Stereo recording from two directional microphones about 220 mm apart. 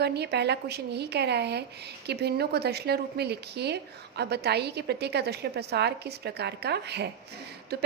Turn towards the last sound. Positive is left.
turn(degrees=-45)  # may be behind; listen again after turning